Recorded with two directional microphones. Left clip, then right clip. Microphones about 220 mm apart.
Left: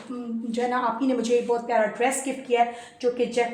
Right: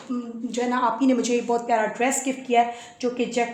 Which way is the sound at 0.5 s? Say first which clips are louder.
Right 2 dB; 35° right (ahead or behind).